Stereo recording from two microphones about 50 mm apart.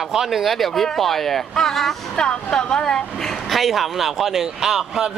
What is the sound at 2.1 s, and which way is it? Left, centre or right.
A woman's voice, centre.